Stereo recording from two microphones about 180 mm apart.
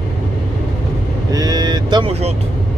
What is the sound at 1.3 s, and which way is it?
Speech, 20° right (ahead or behind).